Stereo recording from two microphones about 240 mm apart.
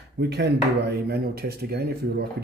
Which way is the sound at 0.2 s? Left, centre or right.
Right.